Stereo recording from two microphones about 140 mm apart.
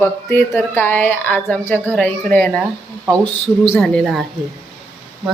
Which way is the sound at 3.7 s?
5° left (ahead or behind).